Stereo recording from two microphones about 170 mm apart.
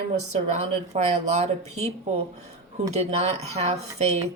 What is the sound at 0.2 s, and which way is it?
Speech, 40° right (ahead or behind).